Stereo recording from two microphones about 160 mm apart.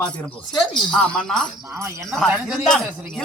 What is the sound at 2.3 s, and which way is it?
Speech, 5° right (ahead or behind).